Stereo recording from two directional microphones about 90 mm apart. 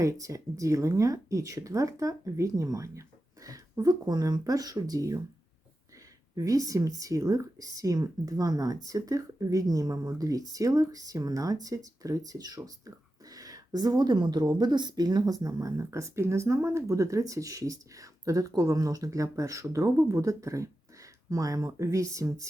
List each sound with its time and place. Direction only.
0.0 s speech: 35° right (ahead or behind)
6.3 s speech: 40° right (ahead or behind)